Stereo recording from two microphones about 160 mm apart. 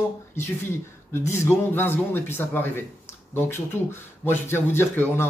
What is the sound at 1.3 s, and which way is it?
Speech, 15° left (ahead or behind).